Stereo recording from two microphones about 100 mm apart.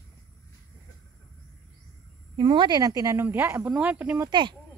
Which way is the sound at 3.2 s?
25° right (ahead or behind).